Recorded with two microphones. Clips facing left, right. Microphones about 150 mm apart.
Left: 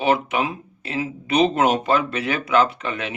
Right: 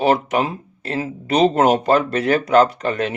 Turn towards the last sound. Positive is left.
turn(degrees=-40)  # may be behind; listen again after turning